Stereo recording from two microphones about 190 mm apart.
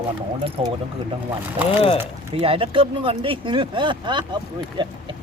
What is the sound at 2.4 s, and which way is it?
Speech, 30° right (ahead or behind).